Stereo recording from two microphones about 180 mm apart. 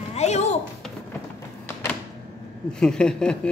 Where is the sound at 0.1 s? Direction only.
40° left (ahead or behind).